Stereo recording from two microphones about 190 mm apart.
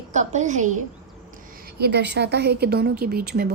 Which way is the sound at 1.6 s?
60° right (ahead or behind).